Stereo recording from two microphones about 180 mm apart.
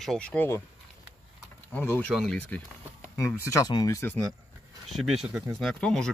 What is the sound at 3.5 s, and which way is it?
Speech, 20° left (ahead or behind).